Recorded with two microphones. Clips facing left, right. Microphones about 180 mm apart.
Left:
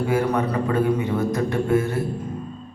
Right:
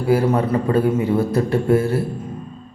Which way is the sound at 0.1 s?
30° right (ahead or behind).